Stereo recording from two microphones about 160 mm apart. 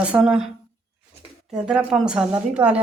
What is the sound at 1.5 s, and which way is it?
A woman's voice, 5° right (ahead or behind).